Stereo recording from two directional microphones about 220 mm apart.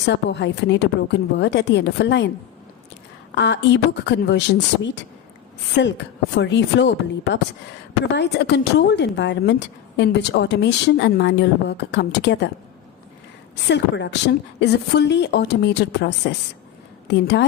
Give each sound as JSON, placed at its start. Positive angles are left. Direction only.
{"t": 0.0, "sound": "speech", "side_deg": 50}
{"t": 3.3, "sound": "speech", "side_deg": 55}
{"t": 8.1, "sound": "speech", "side_deg": 50}
{"t": 13.7, "sound": "speech", "side_deg": 50}